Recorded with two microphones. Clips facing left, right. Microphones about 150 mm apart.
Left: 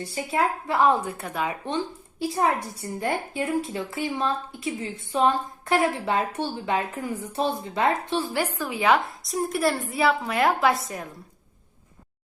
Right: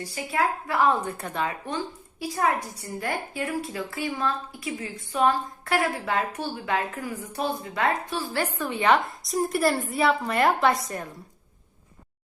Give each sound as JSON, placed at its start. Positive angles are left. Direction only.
{"t": 0.0, "sound": "a woman's voice", "side_deg": 25}
{"t": 1.1, "sound": "speech", "side_deg": 5}
{"t": 1.6, "sound": "a woman's voice", "side_deg": 25}
{"t": 8.3, "sound": "a woman's voice", "side_deg": 10}